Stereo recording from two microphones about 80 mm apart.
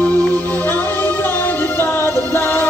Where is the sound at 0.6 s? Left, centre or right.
Left.